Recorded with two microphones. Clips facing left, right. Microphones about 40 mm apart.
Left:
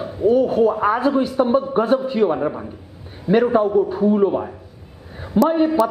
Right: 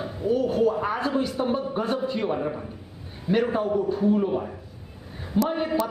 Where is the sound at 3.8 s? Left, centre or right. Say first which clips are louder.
Left 6 dB; centre.